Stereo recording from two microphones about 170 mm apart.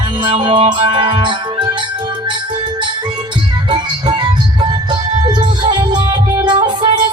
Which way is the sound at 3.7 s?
25° right (ahead or behind).